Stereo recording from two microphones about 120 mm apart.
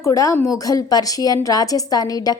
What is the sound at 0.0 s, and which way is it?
A woman's voice, 25° left (ahead or behind).